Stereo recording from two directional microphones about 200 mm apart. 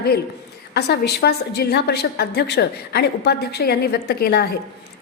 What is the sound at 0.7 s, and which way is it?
A woman's voice, 55° left (ahead or behind).